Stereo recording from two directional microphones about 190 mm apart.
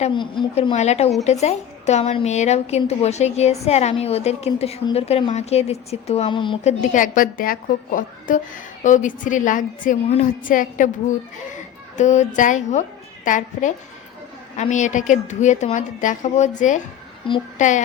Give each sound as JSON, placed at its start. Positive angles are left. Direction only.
{"t": 0.0, "sound": "a woman's voice", "side_deg": 25}
{"t": 0.7, "sound": "a woman's voice", "side_deg": 35}
{"t": 6.7, "sound": "a woman's voice", "side_deg": 40}